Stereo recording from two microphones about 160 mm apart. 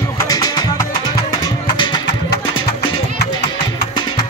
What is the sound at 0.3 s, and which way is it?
Music, 25° left (ahead or behind).